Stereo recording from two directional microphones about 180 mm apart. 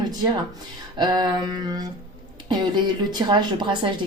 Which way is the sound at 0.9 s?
25° right (ahead or behind).